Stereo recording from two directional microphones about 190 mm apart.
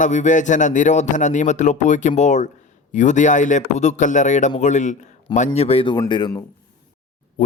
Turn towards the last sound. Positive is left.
turn(degrees=40)  # may be behind; listen again after turning